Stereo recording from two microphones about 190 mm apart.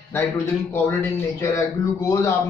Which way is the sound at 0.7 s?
15° left (ahead or behind).